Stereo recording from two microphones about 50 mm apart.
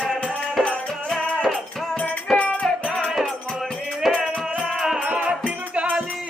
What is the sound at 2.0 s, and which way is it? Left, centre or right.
Music, left.